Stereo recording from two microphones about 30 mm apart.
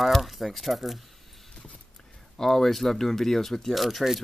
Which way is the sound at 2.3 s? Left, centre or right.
Centre.